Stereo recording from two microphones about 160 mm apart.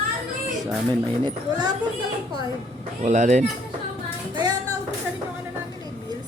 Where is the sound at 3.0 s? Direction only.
50° right (ahead or behind).